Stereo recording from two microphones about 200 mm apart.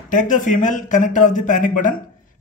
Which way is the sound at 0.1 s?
40° left (ahead or behind).